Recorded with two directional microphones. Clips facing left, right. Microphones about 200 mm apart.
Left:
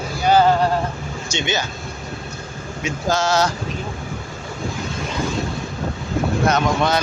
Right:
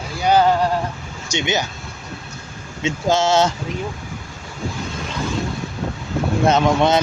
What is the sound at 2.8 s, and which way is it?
Speech, 25° right (ahead or behind).